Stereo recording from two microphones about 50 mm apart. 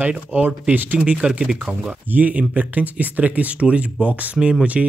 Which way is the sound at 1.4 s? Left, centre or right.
Centre.